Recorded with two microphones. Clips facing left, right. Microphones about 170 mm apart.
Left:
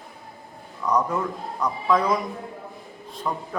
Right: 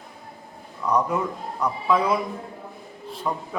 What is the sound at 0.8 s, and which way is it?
A man's voice, 10° right (ahead or behind).